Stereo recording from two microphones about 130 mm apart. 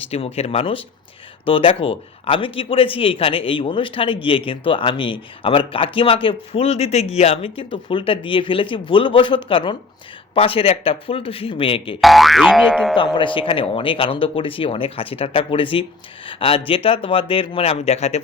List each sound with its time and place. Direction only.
0.1 s speech: 50° left (ahead or behind)
11.9 s boing: centre (ahead or behind)
13.0 s speech: 40° left (ahead or behind)